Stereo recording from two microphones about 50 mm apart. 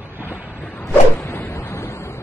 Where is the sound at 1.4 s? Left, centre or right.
Left.